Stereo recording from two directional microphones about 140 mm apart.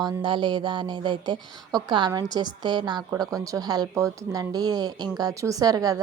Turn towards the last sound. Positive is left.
turn(degrees=-25)  # may be behind; listen again after turning